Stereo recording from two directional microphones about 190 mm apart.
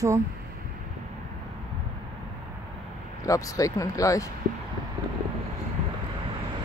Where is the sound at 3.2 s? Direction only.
15° left (ahead or behind).